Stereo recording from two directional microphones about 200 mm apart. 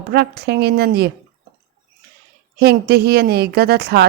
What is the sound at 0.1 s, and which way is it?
A woman's voice, 55° right (ahead or behind).